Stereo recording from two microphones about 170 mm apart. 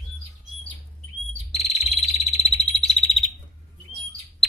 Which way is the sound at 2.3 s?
35° left (ahead or behind).